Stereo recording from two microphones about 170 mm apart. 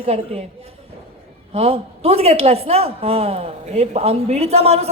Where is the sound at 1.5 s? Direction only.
35° right (ahead or behind).